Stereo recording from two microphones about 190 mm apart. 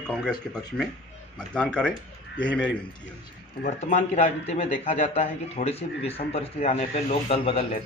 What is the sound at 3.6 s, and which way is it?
A man's voice, 40° left (ahead or behind).